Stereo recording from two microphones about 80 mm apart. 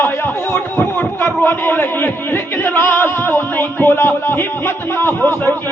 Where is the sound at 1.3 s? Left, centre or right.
Left.